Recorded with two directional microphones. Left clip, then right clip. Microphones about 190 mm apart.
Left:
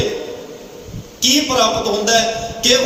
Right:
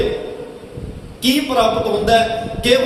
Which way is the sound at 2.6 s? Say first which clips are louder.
Even; 50° left (ahead or behind).